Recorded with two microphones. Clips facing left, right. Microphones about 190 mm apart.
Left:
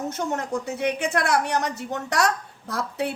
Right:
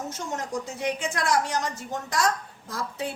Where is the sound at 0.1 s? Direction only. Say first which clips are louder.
Left 5 dB; 60° left (ahead or behind).